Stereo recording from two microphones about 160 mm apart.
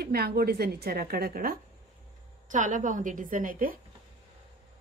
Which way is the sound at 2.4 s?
50° right (ahead or behind).